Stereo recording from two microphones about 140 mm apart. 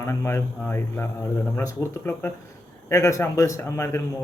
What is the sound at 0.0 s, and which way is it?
A man's voice, 20° left (ahead or behind).